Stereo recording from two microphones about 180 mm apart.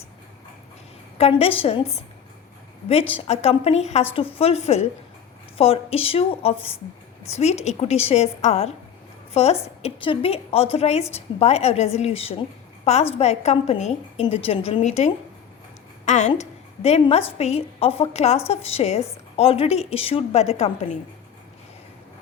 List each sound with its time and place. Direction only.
1.2 s a woman's voice: 30° left (ahead or behind)